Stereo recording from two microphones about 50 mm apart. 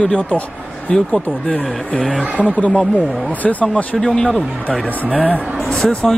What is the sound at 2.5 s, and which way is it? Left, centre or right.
Speech, left.